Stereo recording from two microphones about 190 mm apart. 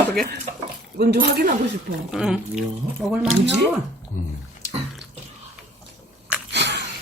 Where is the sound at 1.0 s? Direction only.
55° right (ahead or behind).